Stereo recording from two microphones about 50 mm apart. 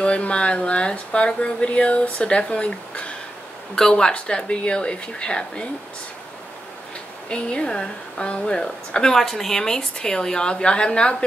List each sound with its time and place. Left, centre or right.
0.0 s speech: left
7.2 s a woman's voice: centre